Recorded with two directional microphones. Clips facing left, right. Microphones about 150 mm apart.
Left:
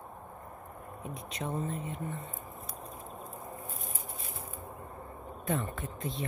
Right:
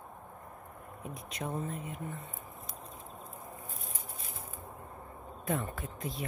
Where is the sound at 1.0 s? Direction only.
5° right (ahead or behind).